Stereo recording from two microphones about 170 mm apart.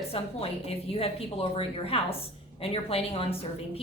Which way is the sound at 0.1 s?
35° left (ahead or behind).